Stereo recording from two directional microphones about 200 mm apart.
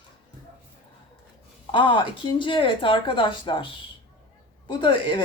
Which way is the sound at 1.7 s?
25° left (ahead or behind).